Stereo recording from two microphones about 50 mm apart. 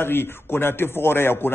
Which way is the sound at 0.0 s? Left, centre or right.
Left.